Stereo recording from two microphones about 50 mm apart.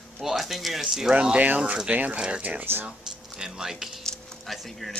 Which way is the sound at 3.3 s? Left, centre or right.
Centre.